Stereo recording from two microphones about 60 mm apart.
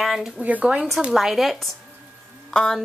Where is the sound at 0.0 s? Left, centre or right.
Centre.